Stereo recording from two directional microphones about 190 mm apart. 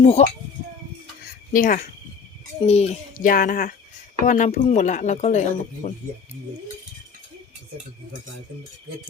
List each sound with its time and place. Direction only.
0.0 s speech: 35° left (ahead or behind)
1.2 s a sound: 45° left (ahead or behind)
2.6 s a child's voice: 35° left (ahead or behind)